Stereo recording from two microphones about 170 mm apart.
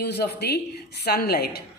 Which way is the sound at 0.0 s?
75° left (ahead or behind).